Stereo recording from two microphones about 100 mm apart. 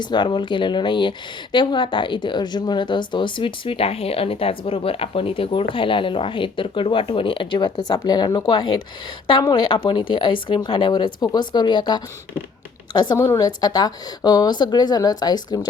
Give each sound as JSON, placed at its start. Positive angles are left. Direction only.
{"t": 0.0, "sound": "speech", "side_deg": 50}
{"t": 9.7, "sound": "speech", "side_deg": 60}
{"t": 13.1, "sound": "speech", "side_deg": 30}